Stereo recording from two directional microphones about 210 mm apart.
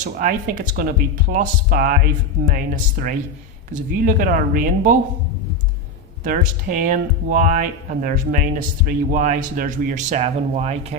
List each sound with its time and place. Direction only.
0.0 s speech: 40° right (ahead or behind)
6.2 s speech: 40° right (ahead or behind)